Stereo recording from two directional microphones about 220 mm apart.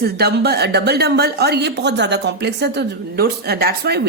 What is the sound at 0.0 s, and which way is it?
A woman's voice, 45° right (ahead or behind).